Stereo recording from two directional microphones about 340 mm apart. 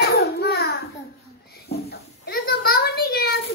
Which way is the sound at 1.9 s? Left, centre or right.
Left.